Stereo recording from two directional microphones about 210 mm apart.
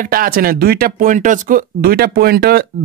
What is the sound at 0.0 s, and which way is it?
Speech, 45° right (ahead or behind).